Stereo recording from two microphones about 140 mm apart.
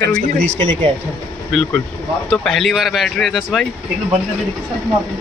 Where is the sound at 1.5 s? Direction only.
Centre (ahead or behind).